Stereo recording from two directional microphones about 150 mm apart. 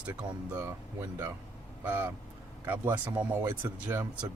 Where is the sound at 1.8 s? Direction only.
10° right (ahead or behind).